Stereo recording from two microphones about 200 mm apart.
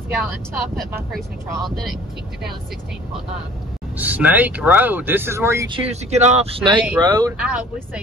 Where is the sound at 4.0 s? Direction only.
10° right (ahead or behind).